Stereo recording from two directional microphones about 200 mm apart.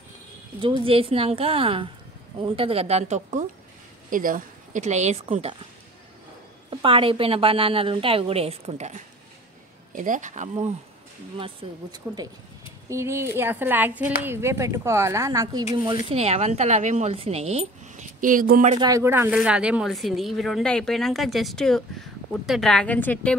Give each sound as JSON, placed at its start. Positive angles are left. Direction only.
{"t": 0.6, "sound": "a woman's voice", "side_deg": -25}
{"t": 6.7, "sound": "a woman's voice", "side_deg": -25}
{"t": 11.3, "sound": "a woman's voice", "side_deg": -25}
{"t": 18.7, "sound": "a woman's voice", "side_deg": -20}